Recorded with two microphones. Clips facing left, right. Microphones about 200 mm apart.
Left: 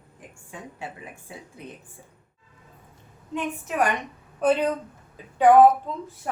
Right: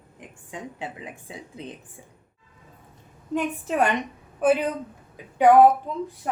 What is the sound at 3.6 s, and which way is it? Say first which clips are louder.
Speech: right 1 dB; 25° right (ahead or behind).